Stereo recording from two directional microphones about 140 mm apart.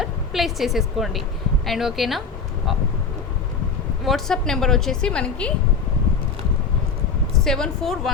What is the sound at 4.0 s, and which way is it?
A woman's voice, centre (ahead or behind).